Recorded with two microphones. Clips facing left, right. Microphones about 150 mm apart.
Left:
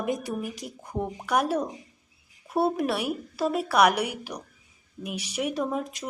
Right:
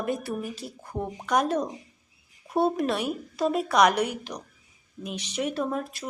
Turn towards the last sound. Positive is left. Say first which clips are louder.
# even
turn(degrees=15)  # may be behind; listen again after turning